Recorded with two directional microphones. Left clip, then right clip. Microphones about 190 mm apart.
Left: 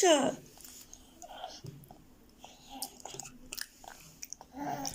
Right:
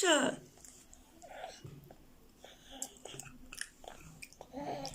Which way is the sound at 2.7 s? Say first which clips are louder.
Left 4 dB; 15° right (ahead or behind).